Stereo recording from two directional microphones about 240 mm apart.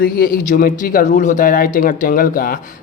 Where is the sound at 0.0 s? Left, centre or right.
Left.